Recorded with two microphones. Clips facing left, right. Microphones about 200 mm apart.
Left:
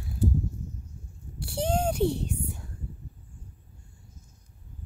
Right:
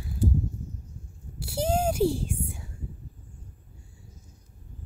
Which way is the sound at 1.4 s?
5° right (ahead or behind).